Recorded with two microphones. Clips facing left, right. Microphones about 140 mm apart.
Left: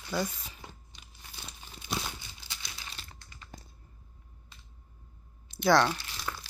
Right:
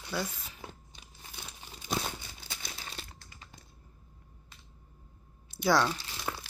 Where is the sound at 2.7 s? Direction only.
35° right (ahead or behind).